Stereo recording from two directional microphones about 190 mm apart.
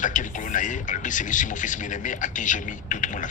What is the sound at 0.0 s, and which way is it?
Speech, 40° left (ahead or behind).